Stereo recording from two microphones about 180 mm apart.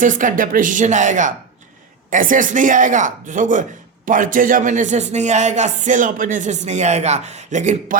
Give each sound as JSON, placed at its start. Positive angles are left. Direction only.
{"t": 0.0, "sound": "speech", "side_deg": -45}